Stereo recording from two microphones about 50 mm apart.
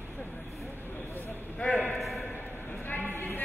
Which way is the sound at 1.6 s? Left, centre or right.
Left.